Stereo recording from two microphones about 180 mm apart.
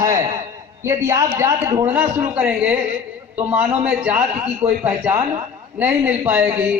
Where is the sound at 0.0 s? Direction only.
20° right (ahead or behind).